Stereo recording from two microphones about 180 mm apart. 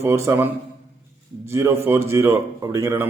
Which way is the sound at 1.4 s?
15° right (ahead or behind).